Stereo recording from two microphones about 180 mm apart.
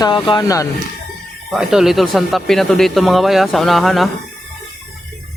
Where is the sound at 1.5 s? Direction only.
Centre (ahead or behind).